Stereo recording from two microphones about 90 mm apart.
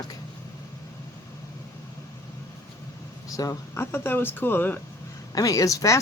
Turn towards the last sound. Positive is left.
turn(degrees=35)  # may be behind; listen again after turning